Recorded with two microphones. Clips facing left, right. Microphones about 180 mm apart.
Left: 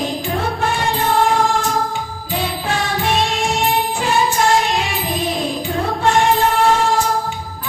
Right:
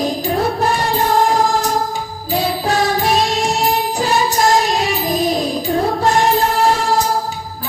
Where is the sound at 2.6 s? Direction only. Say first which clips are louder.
Right 4 dB; 40° right (ahead or behind).